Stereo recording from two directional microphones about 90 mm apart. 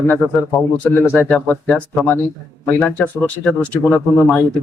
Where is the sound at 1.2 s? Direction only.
15° left (ahead or behind).